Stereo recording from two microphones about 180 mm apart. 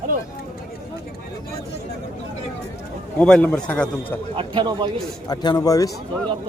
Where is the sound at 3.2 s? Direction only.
5° left (ahead or behind).